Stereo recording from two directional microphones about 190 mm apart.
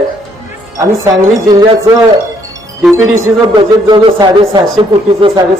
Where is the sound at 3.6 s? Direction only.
25° right (ahead or behind).